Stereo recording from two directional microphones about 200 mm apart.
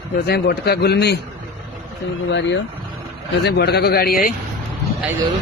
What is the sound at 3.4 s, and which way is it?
Speech, 55° left (ahead or behind).